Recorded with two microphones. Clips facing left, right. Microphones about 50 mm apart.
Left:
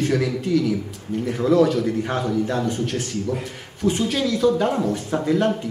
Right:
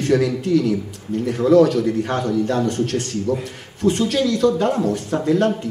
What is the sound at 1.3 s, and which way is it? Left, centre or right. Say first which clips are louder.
Speech: right 4 dB; centre.